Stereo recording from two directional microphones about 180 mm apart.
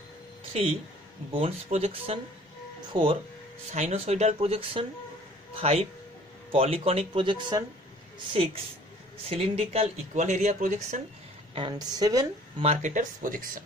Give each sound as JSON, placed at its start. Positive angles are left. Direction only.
{"t": 1.3, "sound": "a woman's voice", "side_deg": -35}
{"t": 3.7, "sound": "speech", "side_deg": -40}
{"t": 9.3, "sound": "speech", "side_deg": -35}
{"t": 11.5, "sound": "a woman's voice", "side_deg": -25}
{"t": 12.6, "sound": "speech", "side_deg": -45}